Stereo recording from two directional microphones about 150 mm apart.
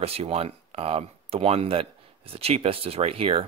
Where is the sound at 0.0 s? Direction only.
40° right (ahead or behind).